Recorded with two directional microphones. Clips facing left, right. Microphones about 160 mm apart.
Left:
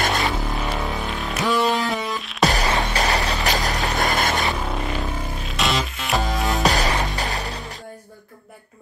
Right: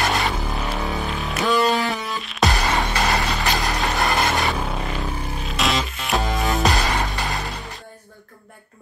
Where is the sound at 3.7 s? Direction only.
Centre (ahead or behind).